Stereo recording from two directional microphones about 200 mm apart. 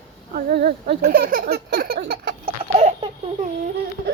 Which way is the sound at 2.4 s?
30° right (ahead or behind).